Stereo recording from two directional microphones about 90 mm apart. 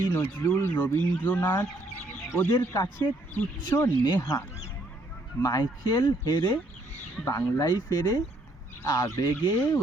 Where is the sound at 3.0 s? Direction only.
45° left (ahead or behind).